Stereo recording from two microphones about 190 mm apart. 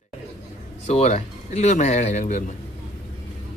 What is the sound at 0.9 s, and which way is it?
Speech, 35° left (ahead or behind).